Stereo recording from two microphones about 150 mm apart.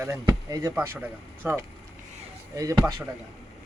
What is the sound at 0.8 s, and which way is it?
A man's voice, 10° right (ahead or behind).